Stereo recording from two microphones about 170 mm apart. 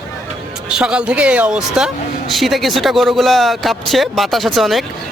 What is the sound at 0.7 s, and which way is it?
Speech, 5° right (ahead or behind).